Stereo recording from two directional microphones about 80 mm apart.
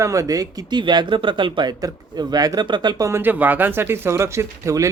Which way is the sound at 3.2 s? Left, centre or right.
Right.